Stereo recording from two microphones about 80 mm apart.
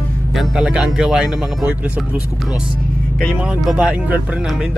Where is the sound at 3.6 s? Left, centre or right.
Centre.